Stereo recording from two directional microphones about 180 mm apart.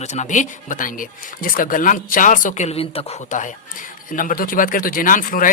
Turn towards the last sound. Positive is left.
turn(degrees=50)  # may be behind; listen again after turning